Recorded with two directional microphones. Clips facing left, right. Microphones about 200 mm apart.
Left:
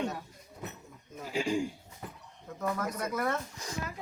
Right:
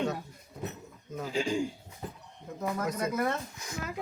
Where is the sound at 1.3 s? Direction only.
5° left (ahead or behind).